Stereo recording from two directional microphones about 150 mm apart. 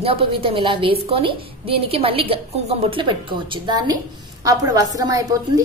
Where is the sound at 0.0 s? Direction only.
40° right (ahead or behind).